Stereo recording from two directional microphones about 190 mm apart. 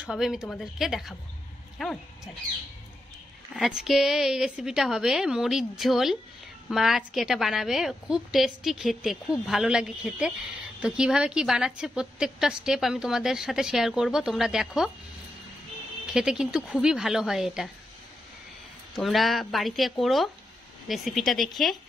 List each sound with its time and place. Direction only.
0.0 s a woman's voice: 5° right (ahead or behind)
3.5 s a woman's voice: centre (ahead or behind)
16.1 s a woman's voice: 5° right (ahead or behind)
18.9 s a woman's voice: centre (ahead or behind)